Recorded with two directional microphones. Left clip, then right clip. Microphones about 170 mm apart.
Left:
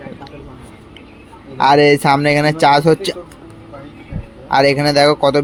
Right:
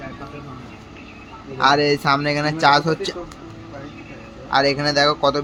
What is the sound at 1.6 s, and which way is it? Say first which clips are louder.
Speech: left 6 dB; 40° left (ahead or behind).